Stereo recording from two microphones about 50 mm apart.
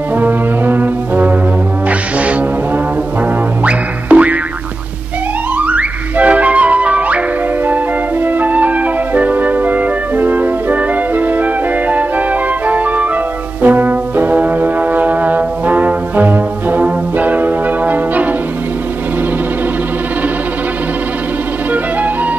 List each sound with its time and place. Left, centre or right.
0.1 s brass instrument: right
1.9 s music: right
3.6 s music: right
5.6 s music: right
13.6 s brass instrument: right